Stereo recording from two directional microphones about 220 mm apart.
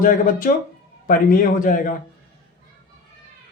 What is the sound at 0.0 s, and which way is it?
A man's voice, 40° left (ahead or behind).